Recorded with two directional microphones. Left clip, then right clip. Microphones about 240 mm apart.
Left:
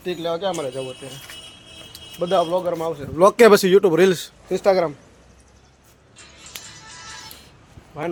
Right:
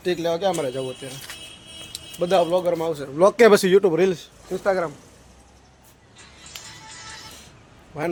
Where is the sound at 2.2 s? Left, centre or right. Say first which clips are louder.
Even; centre.